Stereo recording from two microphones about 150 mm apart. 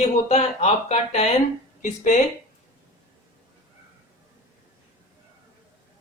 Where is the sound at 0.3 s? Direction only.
45° left (ahead or behind).